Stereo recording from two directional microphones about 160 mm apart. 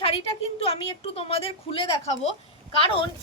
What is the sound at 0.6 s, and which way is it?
A woman's voice, 35° left (ahead or behind).